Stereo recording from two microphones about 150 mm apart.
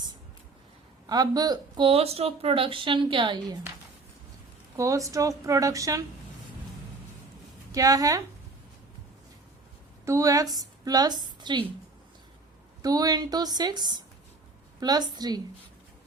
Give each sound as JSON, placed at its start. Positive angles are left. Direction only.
{"t": 1.0, "sound": "speech", "side_deg": -25}
{"t": 4.8, "sound": "a woman's voice", "side_deg": -20}
{"t": 7.7, "sound": "a woman's voice", "side_deg": -25}
{"t": 10.1, "sound": "a woman's voice", "side_deg": -20}
{"t": 12.8, "sound": "a woman's voice", "side_deg": -25}